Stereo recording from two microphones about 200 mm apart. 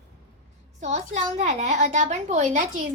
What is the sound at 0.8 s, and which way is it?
A child's voice, 35° right (ahead or behind).